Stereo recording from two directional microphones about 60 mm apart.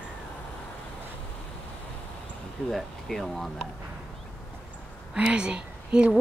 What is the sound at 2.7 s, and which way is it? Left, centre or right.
Speech, centre.